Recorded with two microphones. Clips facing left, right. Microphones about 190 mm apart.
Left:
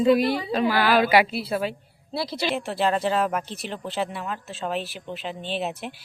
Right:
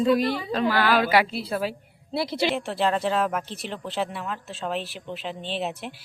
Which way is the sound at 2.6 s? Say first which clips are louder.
Left 1 dB; centre (ahead or behind).